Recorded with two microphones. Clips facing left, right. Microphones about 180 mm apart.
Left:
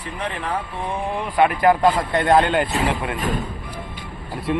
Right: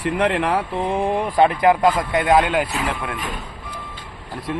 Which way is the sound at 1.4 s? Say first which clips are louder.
Even; 25° right (ahead or behind).